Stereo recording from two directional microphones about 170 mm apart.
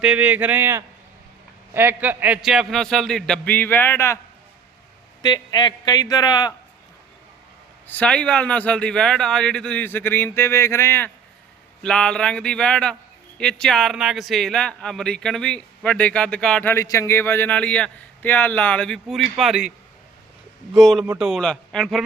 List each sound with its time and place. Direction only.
0.0 s a man's voice: 10° right (ahead or behind); by 4.2 s 15° left (ahead or behind)
5.2 s a man's voice: 25° left (ahead or behind)
7.9 s a man's voice: 10° left (ahead or behind)
16.7 s a man's voice: 20° left (ahead or behind); by 19.7 s 5° right (ahead or behind)
20.7 s a man's voice: centre (ahead or behind)